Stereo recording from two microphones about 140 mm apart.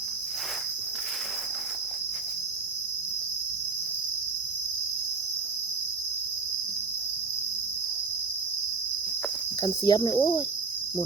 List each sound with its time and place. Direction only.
9.6 s speech: 30° left (ahead or behind)